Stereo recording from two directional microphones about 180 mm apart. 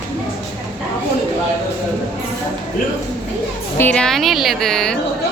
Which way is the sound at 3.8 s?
5° left (ahead or behind).